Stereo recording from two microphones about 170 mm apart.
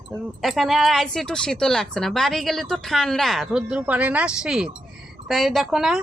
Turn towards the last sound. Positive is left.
turn(degrees=0)  # may be behind; listen again after turning